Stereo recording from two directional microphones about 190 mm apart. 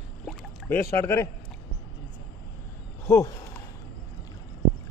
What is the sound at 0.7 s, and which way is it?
Speech, 15° left (ahead or behind).